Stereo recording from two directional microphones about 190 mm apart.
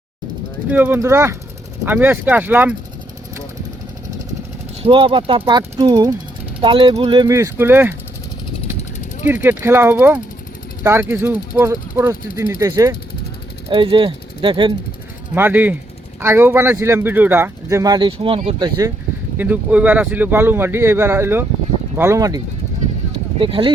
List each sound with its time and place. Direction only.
0.7 s speech: 10° right (ahead or behind)
4.8 s speech: 25° right (ahead or behind); by 7.9 s 10° right (ahead or behind)
9.2 s speech: 10° right (ahead or behind); by 14.7 s 25° right (ahead or behind)
15.4 s speech: 10° right (ahead or behind)
19.4 s speech: 10° right (ahead or behind)
23.4 s speech: 25° right (ahead or behind)